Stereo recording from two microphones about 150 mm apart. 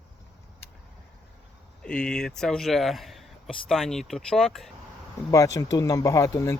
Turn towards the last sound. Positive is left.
turn(degrees=20)  # may be behind; listen again after turning